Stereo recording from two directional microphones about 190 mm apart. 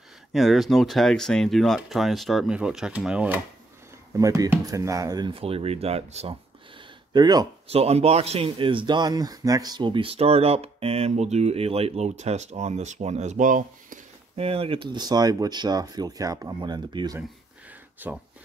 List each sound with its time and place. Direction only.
0.3 s speech: centre (ahead or behind); by 6.3 s 30° right (ahead or behind)
7.2 s speech: 20° right (ahead or behind)
7.6 s speech: 30° right (ahead or behind)
14.4 s speech: 30° right (ahead or behind)
17.9 s speech: 10° right (ahead or behind)